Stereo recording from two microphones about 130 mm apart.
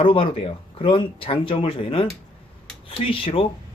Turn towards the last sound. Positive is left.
turn(degrees=45)  # may be behind; listen again after turning